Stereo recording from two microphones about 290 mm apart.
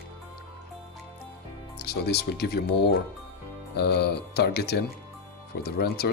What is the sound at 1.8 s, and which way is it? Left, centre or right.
Speech, left.